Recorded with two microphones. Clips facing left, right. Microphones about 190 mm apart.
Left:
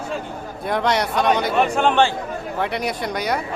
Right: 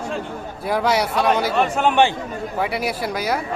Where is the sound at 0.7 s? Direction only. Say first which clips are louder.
Right 1 dB; 5° right (ahead or behind).